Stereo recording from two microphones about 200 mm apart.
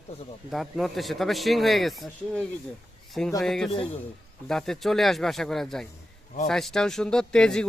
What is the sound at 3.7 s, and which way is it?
Speech, 25° left (ahead or behind).